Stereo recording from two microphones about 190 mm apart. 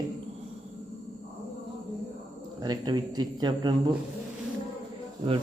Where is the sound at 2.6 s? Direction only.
20° right (ahead or behind).